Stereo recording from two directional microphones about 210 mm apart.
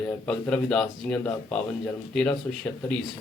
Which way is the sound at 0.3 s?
5° left (ahead or behind).